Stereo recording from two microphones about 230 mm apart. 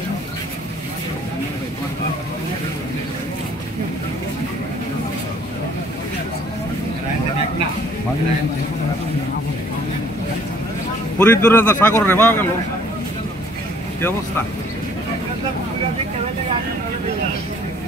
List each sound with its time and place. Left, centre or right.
11.1 s a man's voice: centre